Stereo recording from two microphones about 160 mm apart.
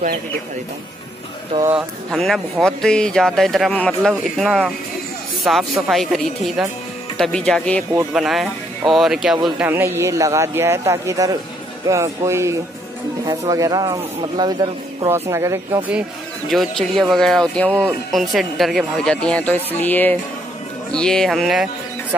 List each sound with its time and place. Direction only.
1.8 s speech: centre (ahead or behind)
9.7 s a man's voice: 15° right (ahead or behind)
16.4 s speech: centre (ahead or behind)